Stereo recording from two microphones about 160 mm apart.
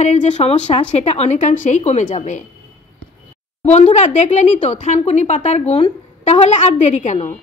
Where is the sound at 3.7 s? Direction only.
45° left (ahead or behind).